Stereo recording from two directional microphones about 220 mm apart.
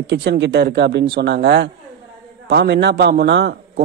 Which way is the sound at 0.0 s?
50° right (ahead or behind).